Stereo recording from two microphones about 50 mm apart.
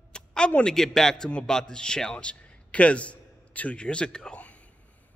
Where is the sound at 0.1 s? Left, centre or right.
Centre.